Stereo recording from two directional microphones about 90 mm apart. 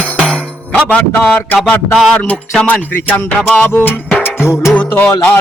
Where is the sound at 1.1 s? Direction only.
15° left (ahead or behind).